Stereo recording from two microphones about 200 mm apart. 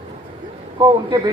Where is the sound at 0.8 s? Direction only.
20° right (ahead or behind).